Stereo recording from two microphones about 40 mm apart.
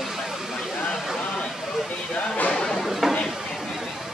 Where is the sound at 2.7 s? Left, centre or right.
Centre.